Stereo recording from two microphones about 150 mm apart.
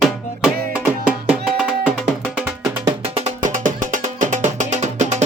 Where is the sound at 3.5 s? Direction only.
60° right (ahead or behind).